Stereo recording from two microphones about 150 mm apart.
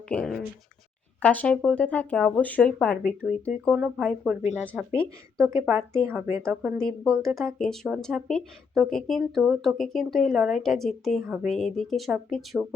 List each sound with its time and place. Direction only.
0.1 s speech: 5° left (ahead or behind)
5.4 s speech: 20° right (ahead or behind)
6.8 s speech: 5° left (ahead or behind)